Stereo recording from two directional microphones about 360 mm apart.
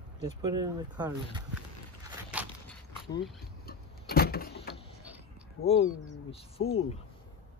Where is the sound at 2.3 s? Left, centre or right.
Centre.